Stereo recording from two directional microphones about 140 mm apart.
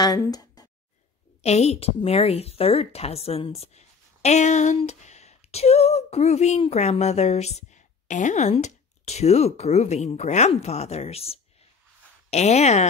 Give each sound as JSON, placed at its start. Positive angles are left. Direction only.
{"t": 0.0, "sound": "speech", "side_deg": 25}
{"t": 1.4, "sound": "speech", "side_deg": 50}